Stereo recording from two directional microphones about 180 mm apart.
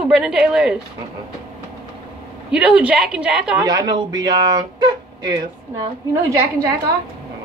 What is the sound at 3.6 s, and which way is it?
Speech, 20° right (ahead or behind).